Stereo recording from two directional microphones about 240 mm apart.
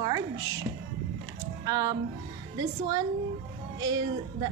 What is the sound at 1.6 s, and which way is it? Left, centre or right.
A woman's voice, centre.